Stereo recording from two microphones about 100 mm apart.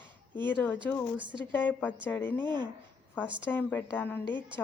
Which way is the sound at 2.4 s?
50° right (ahead or behind).